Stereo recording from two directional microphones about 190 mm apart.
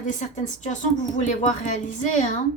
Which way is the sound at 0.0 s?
40° left (ahead or behind).